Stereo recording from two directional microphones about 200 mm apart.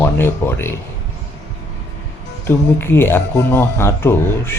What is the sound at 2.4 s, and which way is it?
Speech, 10° left (ahead or behind).